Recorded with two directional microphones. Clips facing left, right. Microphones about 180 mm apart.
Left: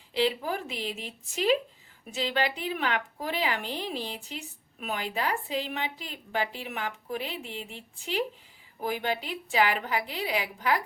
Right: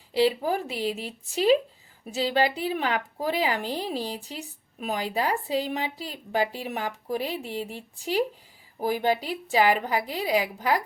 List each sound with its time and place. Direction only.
0.1 s a woman's voice: 40° right (ahead or behind)